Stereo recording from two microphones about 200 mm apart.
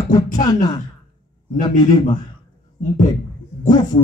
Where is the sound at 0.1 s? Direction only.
20° left (ahead or behind).